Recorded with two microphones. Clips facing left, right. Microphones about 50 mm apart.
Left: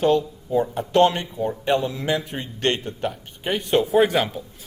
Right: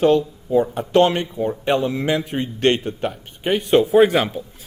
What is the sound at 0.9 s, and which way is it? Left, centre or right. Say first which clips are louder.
Speech: right 2 dB; right.